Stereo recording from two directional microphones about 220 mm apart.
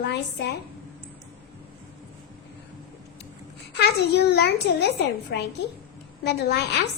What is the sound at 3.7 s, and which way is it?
A child's voice, 50° left (ahead or behind).